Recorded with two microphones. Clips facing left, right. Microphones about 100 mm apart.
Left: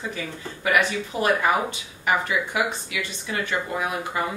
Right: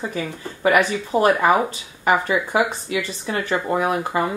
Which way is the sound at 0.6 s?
35° right (ahead or behind).